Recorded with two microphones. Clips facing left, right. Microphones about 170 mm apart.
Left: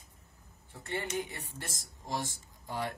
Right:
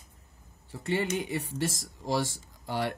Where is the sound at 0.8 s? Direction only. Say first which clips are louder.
Right 6 dB; 90° right.